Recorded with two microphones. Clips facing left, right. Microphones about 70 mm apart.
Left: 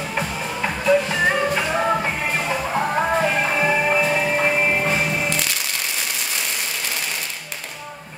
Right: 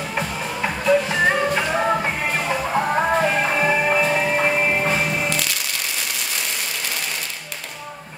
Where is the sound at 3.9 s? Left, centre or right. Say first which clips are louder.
Even; right.